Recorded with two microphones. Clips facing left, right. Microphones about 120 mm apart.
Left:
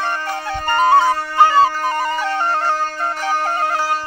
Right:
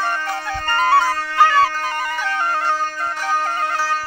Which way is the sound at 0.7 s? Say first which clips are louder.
Left 3 dB; 20° left (ahead or behind).